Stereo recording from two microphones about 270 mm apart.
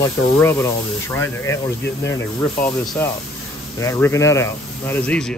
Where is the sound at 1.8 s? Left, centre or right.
Left.